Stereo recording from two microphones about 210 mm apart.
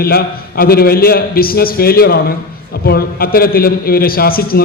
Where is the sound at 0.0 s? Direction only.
45° left (ahead or behind).